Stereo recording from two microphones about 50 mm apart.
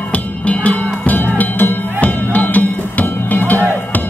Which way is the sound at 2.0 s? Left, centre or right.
Left.